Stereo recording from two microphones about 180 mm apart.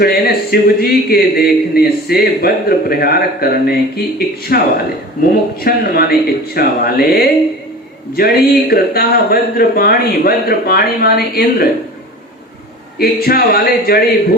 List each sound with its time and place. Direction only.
0.0 s speech: 60° left (ahead or behind)
13.2 s speech: 55° left (ahead or behind)